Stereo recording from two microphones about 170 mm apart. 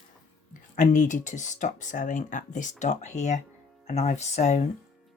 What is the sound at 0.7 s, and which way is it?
Speech, 50° left (ahead or behind).